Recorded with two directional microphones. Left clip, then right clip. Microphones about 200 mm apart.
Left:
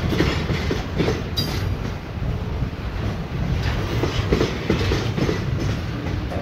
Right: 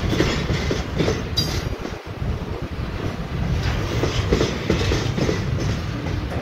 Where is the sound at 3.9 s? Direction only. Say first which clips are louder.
Right 1 dB; 55° left (ahead or behind).